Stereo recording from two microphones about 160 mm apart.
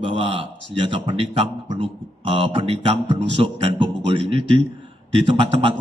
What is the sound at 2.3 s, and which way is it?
A man's voice, 35° right (ahead or behind).